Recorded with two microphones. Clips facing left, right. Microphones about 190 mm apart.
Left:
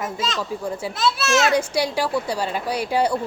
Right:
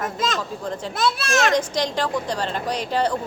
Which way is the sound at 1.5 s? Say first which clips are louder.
Left 1 dB; 10° left (ahead or behind).